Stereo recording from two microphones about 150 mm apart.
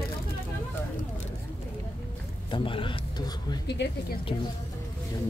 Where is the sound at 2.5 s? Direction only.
35° left (ahead or behind).